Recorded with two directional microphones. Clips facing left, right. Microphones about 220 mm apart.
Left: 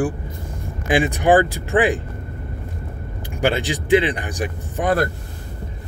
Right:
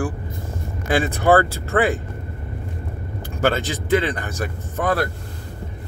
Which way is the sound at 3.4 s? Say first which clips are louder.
Even; 15° left (ahead or behind).